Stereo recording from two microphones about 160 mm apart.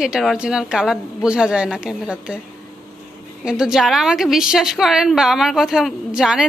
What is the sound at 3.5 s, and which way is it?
A woman's voice, 5° right (ahead or behind).